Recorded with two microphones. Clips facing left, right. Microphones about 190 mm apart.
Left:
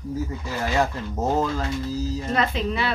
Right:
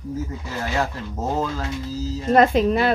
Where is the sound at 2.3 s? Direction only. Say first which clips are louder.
Right 11 dB; 50° right (ahead or behind).